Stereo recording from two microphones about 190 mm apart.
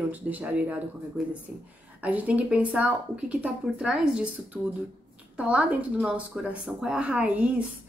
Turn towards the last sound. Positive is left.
turn(degrees=-5)  # may be behind; listen again after turning